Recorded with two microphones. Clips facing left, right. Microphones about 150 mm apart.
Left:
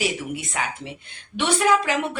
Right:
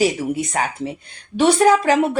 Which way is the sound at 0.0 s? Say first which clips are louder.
Right 8 dB; 40° right (ahead or behind).